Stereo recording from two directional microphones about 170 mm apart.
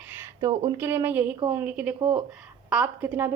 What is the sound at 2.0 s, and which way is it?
Speech, 30° right (ahead or behind).